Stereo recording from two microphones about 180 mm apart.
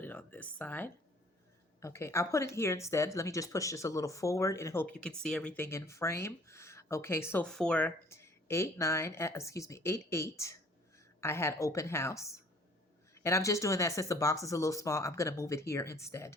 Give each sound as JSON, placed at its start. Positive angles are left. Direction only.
{"t": 0.0, "sound": "speech", "side_deg": 10}